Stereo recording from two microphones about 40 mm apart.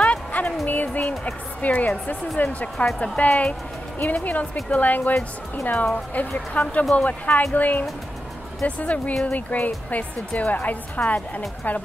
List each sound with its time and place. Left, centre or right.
0.3 s music: left
0.7 s a sound: left
1.2 s a woman's voice: left